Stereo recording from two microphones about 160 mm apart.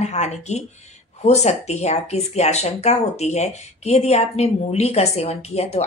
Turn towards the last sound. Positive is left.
turn(degrees=40)  # may be behind; listen again after turning